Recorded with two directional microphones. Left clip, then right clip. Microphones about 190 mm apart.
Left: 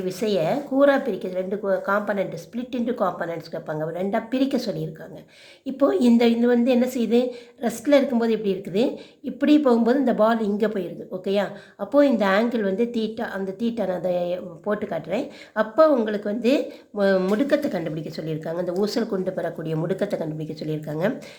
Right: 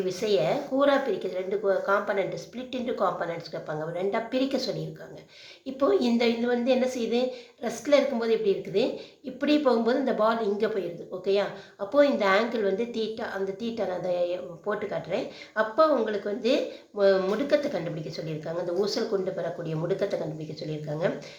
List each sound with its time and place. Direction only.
0.0 s a woman's voice: 30° left (ahead or behind)